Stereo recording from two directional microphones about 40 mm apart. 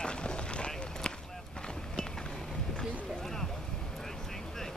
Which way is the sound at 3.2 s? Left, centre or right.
Centre.